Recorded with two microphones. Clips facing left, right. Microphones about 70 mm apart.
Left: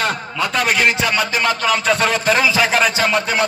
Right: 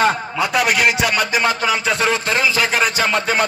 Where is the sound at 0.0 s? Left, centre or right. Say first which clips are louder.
Right 3 dB; centre.